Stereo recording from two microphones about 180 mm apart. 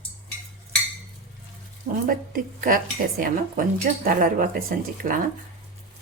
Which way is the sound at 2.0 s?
50° right (ahead or behind).